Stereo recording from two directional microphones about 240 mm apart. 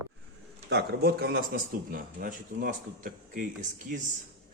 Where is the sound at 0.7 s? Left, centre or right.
Right.